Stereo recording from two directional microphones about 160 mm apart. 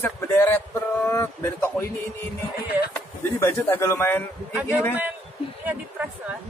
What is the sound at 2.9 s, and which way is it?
Speech, 15° left (ahead or behind).